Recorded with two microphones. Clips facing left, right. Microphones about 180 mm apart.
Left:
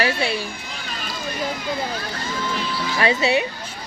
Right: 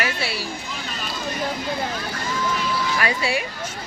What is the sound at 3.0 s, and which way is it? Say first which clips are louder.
Speech: left 10 dB; 25° left (ahead or behind).